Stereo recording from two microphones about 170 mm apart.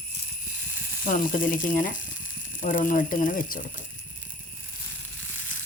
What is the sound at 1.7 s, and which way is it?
Speech, 50° left (ahead or behind).